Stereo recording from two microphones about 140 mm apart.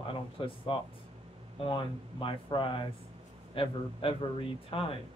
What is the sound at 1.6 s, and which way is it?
Speech, 40° left (ahead or behind).